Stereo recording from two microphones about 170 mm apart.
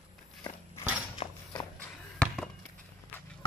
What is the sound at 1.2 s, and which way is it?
Clip-clop, 40° left (ahead or behind).